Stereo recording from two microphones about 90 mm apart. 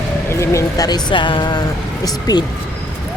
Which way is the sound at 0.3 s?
35° left (ahead or behind).